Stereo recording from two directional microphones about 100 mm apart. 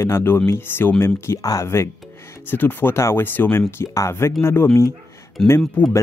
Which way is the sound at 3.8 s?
30° left (ahead or behind).